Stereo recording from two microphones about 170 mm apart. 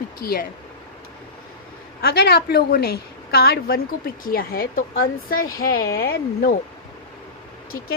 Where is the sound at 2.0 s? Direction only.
70° left (ahead or behind).